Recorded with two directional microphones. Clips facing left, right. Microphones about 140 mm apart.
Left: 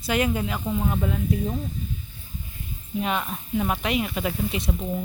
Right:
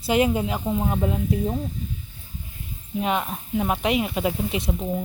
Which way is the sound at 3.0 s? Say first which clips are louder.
Right 2 dB; 15° right (ahead or behind).